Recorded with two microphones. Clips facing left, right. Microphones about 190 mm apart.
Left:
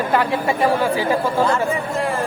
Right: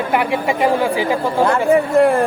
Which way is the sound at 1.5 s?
60° right (ahead or behind).